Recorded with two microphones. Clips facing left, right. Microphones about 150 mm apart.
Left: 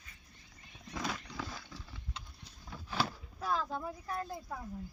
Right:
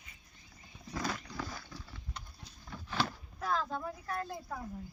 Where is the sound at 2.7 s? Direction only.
5° left (ahead or behind).